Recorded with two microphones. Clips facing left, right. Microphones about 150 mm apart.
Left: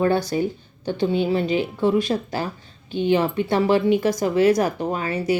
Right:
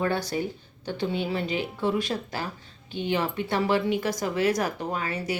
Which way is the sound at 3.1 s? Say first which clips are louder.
Left 7 dB; 25° left (ahead or behind).